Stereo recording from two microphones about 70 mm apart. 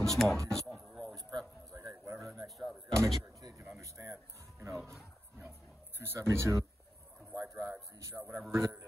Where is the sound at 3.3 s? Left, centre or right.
Right.